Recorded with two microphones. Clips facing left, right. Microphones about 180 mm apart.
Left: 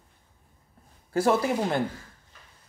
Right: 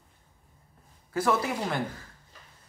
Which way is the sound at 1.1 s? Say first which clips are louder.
Left 4 dB; 30° left (ahead or behind).